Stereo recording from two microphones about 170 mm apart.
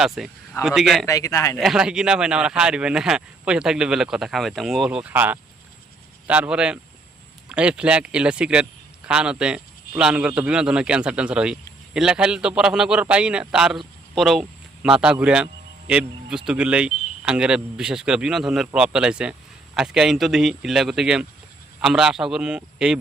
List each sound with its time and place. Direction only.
0.0 s speech: centre (ahead or behind)
1.0 s speech: 20° left (ahead or behind)
1.5 s speech: centre (ahead or behind)